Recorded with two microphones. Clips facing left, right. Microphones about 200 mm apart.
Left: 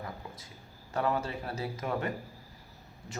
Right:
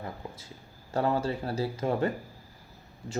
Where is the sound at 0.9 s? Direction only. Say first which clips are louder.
Right 4 dB; 30° right (ahead or behind).